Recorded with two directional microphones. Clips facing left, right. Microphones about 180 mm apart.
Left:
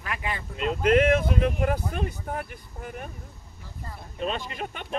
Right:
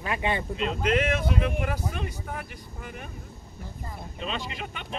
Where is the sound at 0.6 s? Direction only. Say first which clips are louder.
Left 7 dB; 50° left (ahead or behind).